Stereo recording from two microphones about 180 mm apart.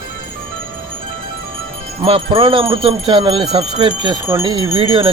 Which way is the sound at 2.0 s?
30° right (ahead or behind).